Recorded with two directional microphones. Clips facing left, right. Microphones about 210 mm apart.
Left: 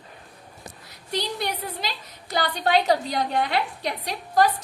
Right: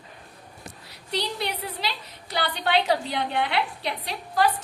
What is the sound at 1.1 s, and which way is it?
A woman's voice, 45° left (ahead or behind).